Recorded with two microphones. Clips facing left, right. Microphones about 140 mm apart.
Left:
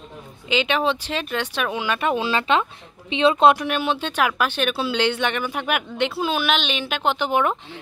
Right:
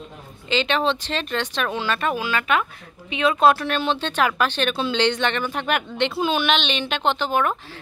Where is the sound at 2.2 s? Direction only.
30° left (ahead or behind).